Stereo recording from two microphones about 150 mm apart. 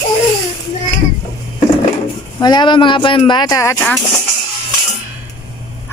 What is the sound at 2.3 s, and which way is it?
Speech, 30° left (ahead or behind).